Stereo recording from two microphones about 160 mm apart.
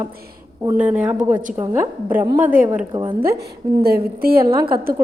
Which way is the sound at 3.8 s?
75° right (ahead or behind).